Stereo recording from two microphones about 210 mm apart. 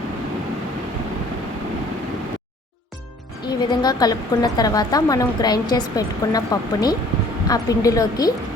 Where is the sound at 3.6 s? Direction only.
20° left (ahead or behind).